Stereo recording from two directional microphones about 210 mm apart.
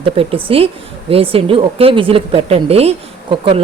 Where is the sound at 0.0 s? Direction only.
25° right (ahead or behind).